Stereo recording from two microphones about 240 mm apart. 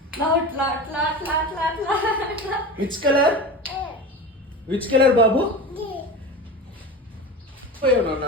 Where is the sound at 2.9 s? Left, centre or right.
Right.